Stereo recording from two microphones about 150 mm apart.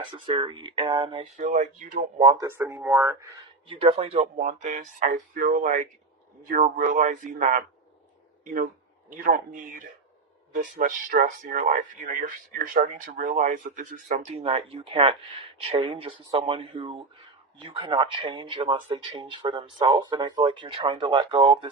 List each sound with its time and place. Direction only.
0.1 s speech: 35° right (ahead or behind)
1.4 s speech: 50° right (ahead or behind)
2.1 s speech: 35° right (ahead or behind)
2.4 s speech: 15° right (ahead or behind)
3.7 s speech: 40° right (ahead or behind); by 7.6 s 60° right (ahead or behind)
9.2 s speech: 65° right (ahead or behind)
14.4 s speech: 40° right (ahead or behind)